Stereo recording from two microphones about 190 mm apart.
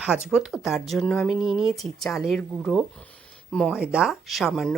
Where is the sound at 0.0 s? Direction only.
5° right (ahead or behind).